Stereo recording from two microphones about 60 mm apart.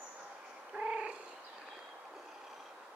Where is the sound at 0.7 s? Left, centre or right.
Centre.